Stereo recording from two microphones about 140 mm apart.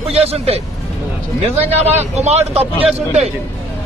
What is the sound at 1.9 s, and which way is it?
Speech, 50° right (ahead or behind).